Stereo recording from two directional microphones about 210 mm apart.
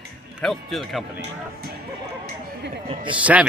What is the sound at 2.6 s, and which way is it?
Speech, 55° right (ahead or behind).